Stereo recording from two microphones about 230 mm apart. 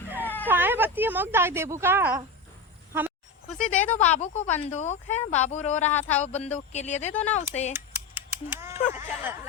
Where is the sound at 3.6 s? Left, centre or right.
Left.